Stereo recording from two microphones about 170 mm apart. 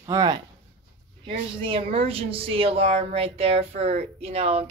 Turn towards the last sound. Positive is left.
turn(degrees=-35)  # may be behind; listen again after turning